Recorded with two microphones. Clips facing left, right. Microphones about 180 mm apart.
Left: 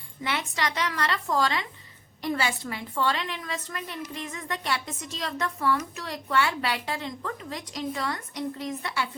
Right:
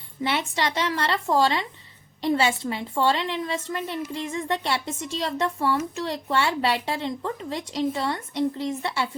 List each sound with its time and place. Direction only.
0.2 s a woman's voice: 25° right (ahead or behind)